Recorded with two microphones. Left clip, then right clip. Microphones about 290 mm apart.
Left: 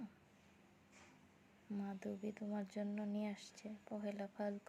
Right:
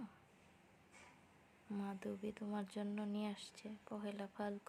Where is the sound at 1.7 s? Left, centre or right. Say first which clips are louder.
Right 1 dB; centre.